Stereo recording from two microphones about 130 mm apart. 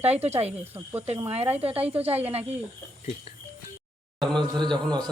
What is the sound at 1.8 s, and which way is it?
Speech, 50° right (ahead or behind).